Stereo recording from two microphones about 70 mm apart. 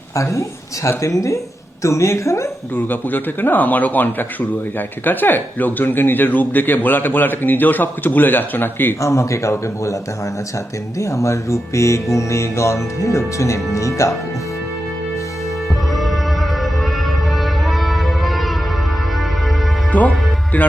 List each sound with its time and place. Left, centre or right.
0.2 s music: left
2.7 s speech: left
9.0 s music: left
17.4 s music: centre
19.9 s music: left